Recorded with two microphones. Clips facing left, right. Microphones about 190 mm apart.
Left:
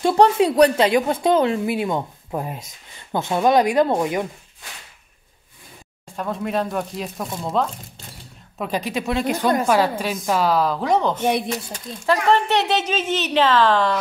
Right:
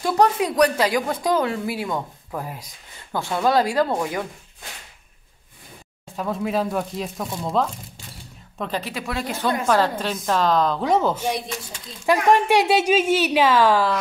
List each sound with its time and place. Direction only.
0.0 s speech: 30° left (ahead or behind)
6.1 s speech: centre (ahead or behind)
8.5 s a woman's voice: 10° left (ahead or behind); by 13.9 s 10° right (ahead or behind)